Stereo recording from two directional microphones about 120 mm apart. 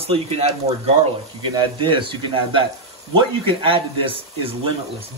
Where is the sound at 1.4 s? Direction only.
40° right (ahead or behind).